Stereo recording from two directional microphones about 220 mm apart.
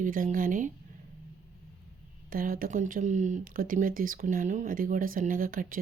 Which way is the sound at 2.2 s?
40° right (ahead or behind).